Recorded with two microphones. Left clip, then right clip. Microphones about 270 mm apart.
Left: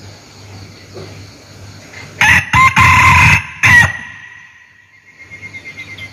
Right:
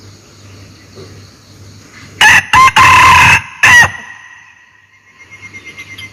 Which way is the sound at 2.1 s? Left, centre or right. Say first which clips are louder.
Right 4 dB; centre.